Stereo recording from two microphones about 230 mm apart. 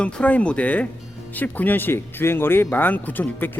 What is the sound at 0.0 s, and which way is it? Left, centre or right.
Speech, centre.